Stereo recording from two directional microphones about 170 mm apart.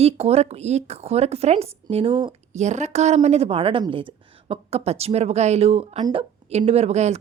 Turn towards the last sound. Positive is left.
turn(degrees=-40)  # may be behind; listen again after turning